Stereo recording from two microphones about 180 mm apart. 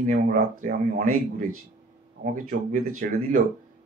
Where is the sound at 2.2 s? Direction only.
50° right (ahead or behind).